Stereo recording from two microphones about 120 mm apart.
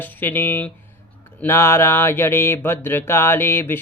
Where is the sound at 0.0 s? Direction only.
15° left (ahead or behind).